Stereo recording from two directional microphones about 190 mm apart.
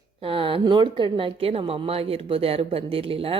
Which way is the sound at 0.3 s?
30° right (ahead or behind).